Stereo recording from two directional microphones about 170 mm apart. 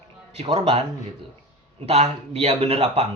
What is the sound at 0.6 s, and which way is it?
Speech, 35° right (ahead or behind).